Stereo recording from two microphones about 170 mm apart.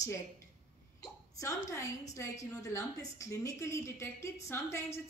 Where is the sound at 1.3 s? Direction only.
20° left (ahead or behind).